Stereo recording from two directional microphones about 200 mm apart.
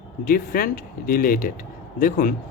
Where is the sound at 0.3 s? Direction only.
45° left (ahead or behind).